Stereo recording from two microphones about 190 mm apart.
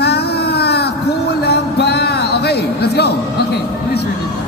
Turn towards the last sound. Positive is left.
turn(degrees=60)  # may be behind; listen again after turning